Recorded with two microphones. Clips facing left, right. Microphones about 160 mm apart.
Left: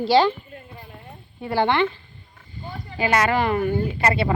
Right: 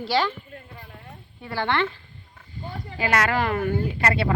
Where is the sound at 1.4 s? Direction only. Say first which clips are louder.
Left 5 dB; 20° left (ahead or behind).